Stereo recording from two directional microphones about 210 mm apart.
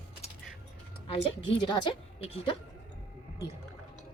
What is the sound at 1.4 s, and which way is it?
Speech, 25° left (ahead or behind).